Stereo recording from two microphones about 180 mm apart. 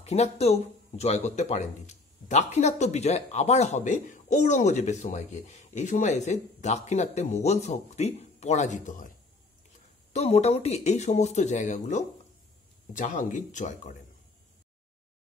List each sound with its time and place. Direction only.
0.0 s speech: 35° left (ahead or behind)
10.1 s speech: 35° left (ahead or behind)